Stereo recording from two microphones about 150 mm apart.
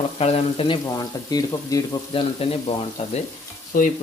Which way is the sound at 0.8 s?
25° left (ahead or behind).